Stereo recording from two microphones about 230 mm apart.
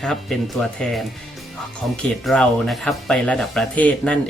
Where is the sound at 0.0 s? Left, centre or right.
Centre.